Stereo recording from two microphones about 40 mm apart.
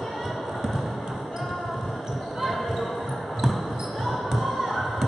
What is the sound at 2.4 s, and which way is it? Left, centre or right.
Basketball bounce, centre.